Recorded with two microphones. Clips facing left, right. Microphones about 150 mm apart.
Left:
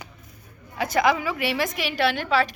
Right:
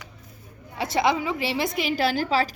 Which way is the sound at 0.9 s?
25° right (ahead or behind).